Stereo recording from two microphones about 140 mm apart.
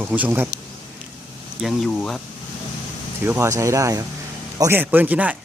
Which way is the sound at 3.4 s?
20° right (ahead or behind).